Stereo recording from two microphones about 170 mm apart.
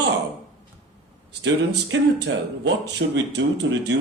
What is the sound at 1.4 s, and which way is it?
Speech, 90° right.